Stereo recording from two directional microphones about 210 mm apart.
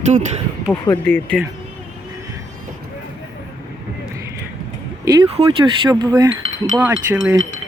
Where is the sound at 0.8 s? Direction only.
10° left (ahead or behind).